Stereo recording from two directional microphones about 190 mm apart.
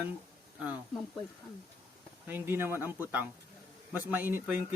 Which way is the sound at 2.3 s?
10° right (ahead or behind).